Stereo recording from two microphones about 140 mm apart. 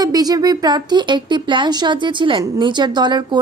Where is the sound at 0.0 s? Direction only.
25° right (ahead or behind).